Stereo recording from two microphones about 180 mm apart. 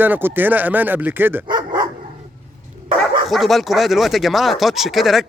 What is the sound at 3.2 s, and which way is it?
Speech, centre (ahead or behind).